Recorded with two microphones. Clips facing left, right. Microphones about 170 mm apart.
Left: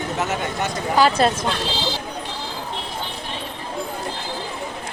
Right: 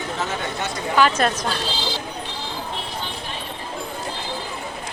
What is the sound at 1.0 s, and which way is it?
Speech, 35° left (ahead or behind).